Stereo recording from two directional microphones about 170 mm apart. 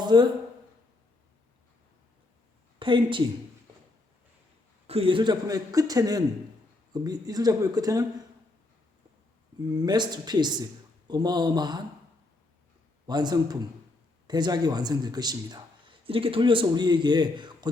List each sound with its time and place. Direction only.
0.0 s speech: 25° right (ahead or behind)
2.7 s a woman's voice: 30° right (ahead or behind)
4.9 s a man's voice: 35° right (ahead or behind)
9.7 s a man's voice: 25° right (ahead or behind)
13.1 s a man's voice: 25° right (ahead or behind)